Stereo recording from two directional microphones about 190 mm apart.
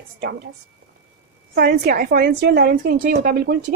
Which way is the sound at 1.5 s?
55° right (ahead or behind).